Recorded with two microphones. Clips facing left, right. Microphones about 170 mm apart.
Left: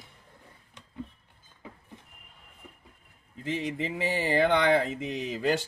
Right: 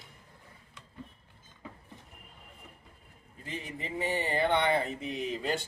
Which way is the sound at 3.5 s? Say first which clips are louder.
Left 8 dB; 90° left.